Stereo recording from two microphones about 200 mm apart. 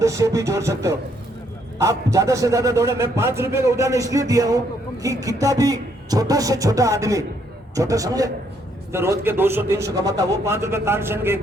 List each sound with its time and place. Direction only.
0.0 s a man's voice: 15° right (ahead or behind)